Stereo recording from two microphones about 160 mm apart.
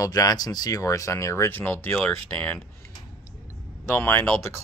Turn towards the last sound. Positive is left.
turn(degrees=15)  # may be behind; listen again after turning